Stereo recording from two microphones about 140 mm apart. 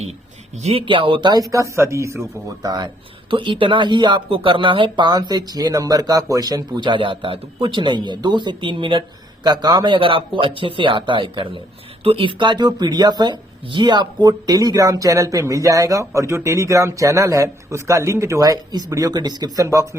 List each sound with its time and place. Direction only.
0.6 s speech: 45° right (ahead or behind); by 20.0 s 20° right (ahead or behind)